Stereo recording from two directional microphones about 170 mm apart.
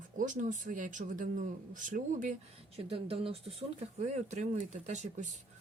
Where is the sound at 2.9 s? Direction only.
35° right (ahead or behind).